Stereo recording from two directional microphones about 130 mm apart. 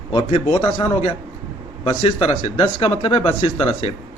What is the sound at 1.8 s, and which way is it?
A man's voice, 45° left (ahead or behind).